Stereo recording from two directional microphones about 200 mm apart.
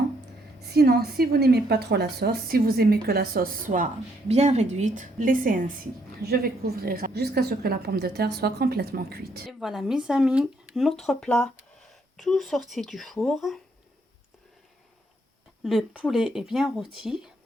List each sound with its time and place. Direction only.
0.7 s a woman's voice: 50° right (ahead or behind)
4.3 s a woman's voice: 35° right (ahead or behind); by 9.5 s 50° right (ahead or behind)
9.5 s speech: centre (ahead or behind)
15.6 s speech: 5° right (ahead or behind)